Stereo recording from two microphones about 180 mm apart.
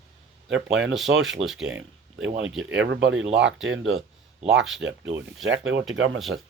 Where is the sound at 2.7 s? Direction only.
90° right.